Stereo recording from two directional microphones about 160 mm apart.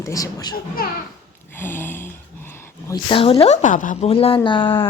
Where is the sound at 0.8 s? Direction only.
70° left (ahead or behind).